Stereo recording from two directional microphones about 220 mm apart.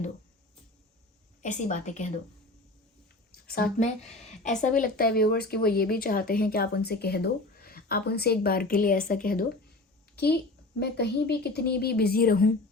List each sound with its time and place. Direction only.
1.4 s speech: 35° left (ahead or behind)
3.4 s speech: 40° left (ahead or behind)